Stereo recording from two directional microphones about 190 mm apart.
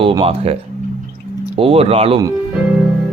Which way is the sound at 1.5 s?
30° right (ahead or behind).